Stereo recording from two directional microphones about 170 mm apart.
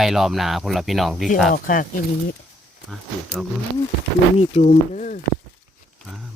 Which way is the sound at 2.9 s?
5° left (ahead or behind).